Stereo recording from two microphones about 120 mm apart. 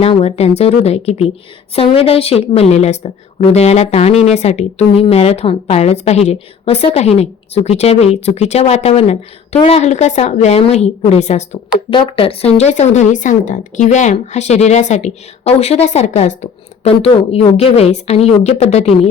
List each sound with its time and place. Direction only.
0.0 s a woman's voice: 60° left (ahead or behind)
11.9 s a woman's voice: 45° left (ahead or behind); by 18.9 s 60° left (ahead or behind)